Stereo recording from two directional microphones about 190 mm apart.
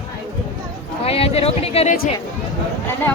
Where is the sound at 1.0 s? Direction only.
30° left (ahead or behind).